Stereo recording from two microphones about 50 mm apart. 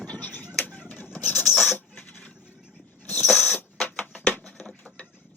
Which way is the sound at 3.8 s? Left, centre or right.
Left.